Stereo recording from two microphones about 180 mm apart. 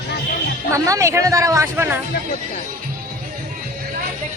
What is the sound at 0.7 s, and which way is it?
Speech, 15° right (ahead or behind).